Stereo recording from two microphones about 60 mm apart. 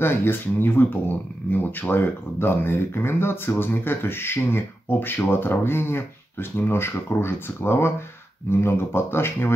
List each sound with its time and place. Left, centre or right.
0.0 s speech: left